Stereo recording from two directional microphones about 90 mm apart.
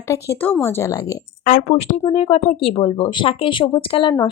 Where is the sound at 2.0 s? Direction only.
90° left.